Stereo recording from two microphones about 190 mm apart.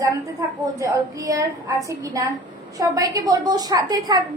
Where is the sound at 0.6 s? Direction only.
15° right (ahead or behind).